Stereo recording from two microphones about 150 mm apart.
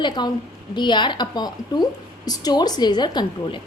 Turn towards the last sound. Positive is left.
turn(degrees=30)  # may be behind; listen again after turning